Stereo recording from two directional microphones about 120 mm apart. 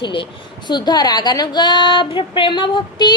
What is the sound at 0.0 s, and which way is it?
Speech, 45° left (ahead or behind).